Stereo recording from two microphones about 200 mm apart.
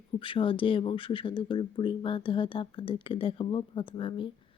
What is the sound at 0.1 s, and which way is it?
Speech, 25° left (ahead or behind).